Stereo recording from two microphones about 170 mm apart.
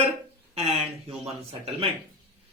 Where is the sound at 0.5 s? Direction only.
35° right (ahead or behind).